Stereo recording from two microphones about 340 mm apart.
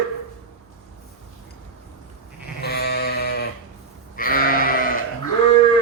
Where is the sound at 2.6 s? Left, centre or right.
Left.